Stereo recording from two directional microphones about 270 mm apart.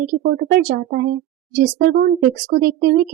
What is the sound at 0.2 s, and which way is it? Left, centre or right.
Speech, right.